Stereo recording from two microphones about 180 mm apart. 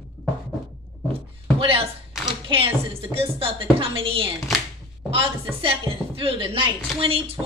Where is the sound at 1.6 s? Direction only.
30° right (ahead or behind).